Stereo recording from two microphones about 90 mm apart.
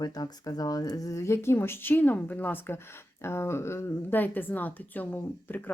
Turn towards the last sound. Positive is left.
turn(degrees=20)  # may be behind; listen again after turning